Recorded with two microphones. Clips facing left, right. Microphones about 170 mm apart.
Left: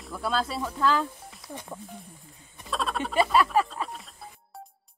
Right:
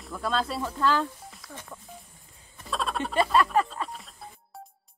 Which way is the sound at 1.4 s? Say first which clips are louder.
Left 7 dB; 20° left (ahead or behind).